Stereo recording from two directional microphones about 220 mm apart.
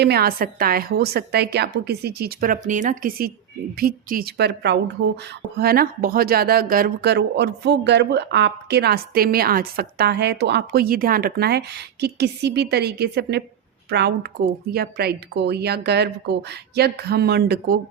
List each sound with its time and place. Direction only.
0.0 s speech: 45° right (ahead or behind)